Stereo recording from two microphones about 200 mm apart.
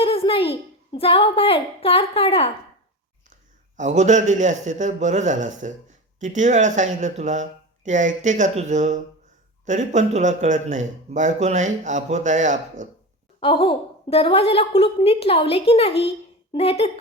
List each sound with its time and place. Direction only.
0.0 s a sound: 30° left (ahead or behind)
0.9 s a woman's voice: 25° left (ahead or behind)
3.8 s speech: 35° right (ahead or behind)
13.4 s a woman's voice: 25° left (ahead or behind)